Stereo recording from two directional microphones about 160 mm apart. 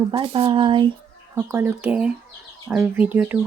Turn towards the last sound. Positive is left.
turn(degrees=-10)  # may be behind; listen again after turning